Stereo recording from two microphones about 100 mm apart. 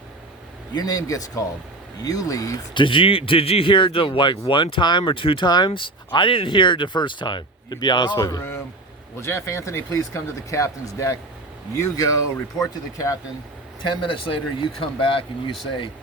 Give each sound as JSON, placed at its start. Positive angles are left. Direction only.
{"t": 0.8, "sound": "speech", "side_deg": 40}
{"t": 2.7, "sound": "speech", "side_deg": 60}
{"t": 8.2, "sound": "speech", "side_deg": 30}
{"t": 13.8, "sound": "speech", "side_deg": 50}